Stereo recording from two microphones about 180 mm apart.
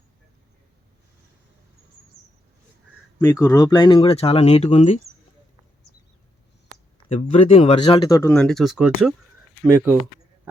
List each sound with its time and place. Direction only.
3.2 s speech: 15° left (ahead or behind); by 4.9 s 35° left (ahead or behind)
7.1 s speech: 35° left (ahead or behind)
8.0 s speech: 20° left (ahead or behind)
8.3 s speech: 5° left (ahead or behind); by 10.0 s 10° right (ahead or behind)